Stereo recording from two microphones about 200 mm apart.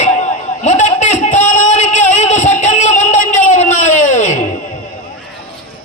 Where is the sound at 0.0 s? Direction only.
35° left (ahead or behind).